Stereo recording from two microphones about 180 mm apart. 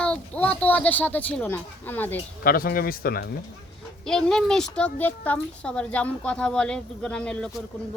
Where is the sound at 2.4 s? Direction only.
55° left (ahead or behind).